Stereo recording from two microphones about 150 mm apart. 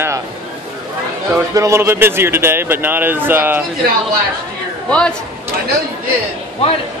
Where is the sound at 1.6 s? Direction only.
15° right (ahead or behind).